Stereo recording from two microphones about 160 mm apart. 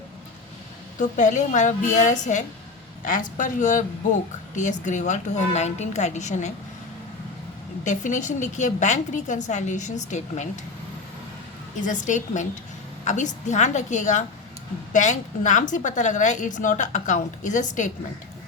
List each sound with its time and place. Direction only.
0.9 s a woman's voice: 50° left (ahead or behind)
7.9 s a woman's voice: 50° left (ahead or behind)
11.8 s a woman's voice: 50° left (ahead or behind)